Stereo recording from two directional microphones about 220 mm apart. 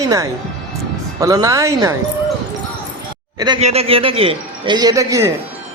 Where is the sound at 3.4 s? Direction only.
20° right (ahead or behind).